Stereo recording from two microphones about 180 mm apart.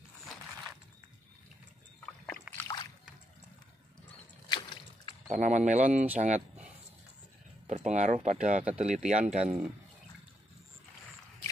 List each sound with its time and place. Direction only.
2.5 s slosh: 10° right (ahead or behind)
4.5 s a sound: 25° left (ahead or behind)
5.3 s speech: 40° right (ahead or behind)
7.6 s speech: 40° right (ahead or behind)